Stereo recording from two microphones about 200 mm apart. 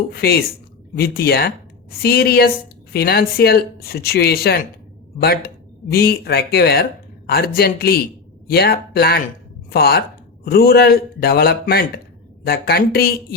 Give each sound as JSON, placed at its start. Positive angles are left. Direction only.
{"t": 0.1, "sound": "speech", "side_deg": 50}
{"t": 5.9, "sound": "speech", "side_deg": 50}